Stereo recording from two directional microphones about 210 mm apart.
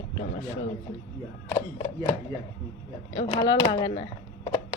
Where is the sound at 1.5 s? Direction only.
20° left (ahead or behind).